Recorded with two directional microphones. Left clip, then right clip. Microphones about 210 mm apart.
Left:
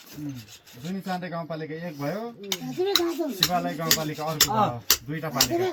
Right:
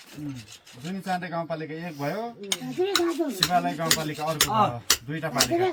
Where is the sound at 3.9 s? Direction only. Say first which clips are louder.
Even; 25° right (ahead or behind).